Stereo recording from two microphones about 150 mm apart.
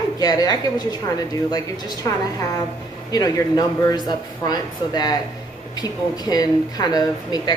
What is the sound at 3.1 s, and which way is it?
A woman's voice, 25° left (ahead or behind).